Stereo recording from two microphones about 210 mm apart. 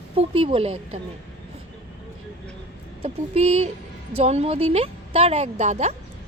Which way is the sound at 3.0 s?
30° right (ahead or behind).